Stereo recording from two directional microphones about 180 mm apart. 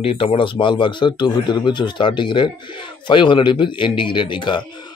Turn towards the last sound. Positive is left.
turn(degrees=25)  # may be behind; listen again after turning